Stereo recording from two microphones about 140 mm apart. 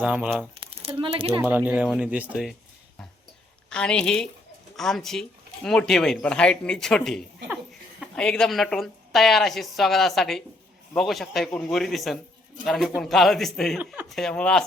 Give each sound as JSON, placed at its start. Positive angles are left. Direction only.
{"t": 0.0, "sound": "speech", "side_deg": -10}
{"t": 0.8, "sound": "speech", "side_deg": -40}
{"t": 1.4, "sound": "speech", "side_deg": -15}
{"t": 3.7, "sound": "speech", "side_deg": 5}
{"t": 13.7, "sound": "speech", "side_deg": -15}
{"t": 14.1, "sound": "speech", "side_deg": 5}